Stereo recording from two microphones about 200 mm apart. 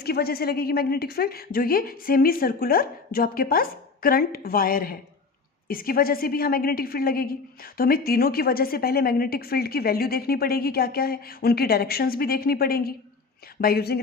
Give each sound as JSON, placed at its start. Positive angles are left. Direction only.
{"t": 0.0, "sound": "a woman's voice", "side_deg": 50}